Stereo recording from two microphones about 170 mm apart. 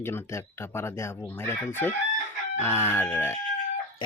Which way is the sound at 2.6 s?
15° left (ahead or behind).